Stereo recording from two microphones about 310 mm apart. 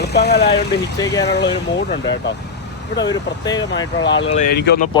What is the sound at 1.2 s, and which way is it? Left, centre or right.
Speech, left.